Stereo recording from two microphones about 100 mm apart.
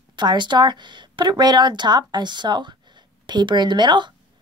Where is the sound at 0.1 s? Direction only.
50° right (ahead or behind).